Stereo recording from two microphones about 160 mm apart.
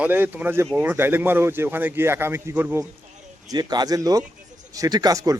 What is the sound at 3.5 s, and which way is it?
A man's voice, 25° right (ahead or behind).